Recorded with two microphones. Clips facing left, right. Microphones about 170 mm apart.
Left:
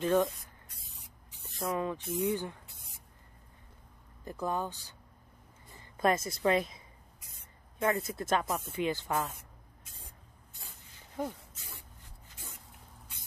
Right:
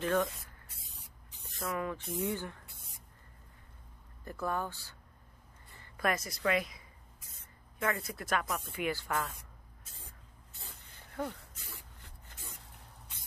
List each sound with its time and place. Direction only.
0.0 s speech: 15° left (ahead or behind)
1.6 s a woman's voice: 20° left (ahead or behind)
4.2 s a woman's voice: 15° left (ahead or behind)
7.8 s a woman's voice: 25° left (ahead or behind)
11.2 s speech: 15° left (ahead or behind)
12.3 s a sound: 55° right (ahead or behind)